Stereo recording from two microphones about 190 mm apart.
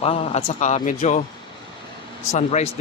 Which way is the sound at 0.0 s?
30° left (ahead or behind).